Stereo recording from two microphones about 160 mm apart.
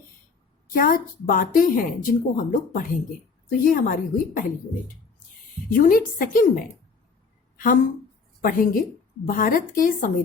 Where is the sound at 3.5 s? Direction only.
60° left (ahead or behind).